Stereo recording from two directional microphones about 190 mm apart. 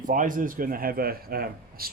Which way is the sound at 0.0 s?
45° right (ahead or behind).